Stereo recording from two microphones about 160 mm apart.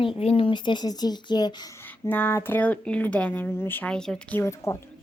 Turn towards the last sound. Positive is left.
turn(degrees=15)  # may be behind; listen again after turning